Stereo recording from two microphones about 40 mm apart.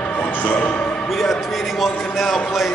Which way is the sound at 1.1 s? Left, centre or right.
Centre.